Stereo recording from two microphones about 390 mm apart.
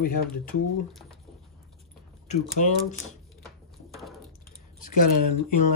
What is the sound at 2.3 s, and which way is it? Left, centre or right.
Speech, centre.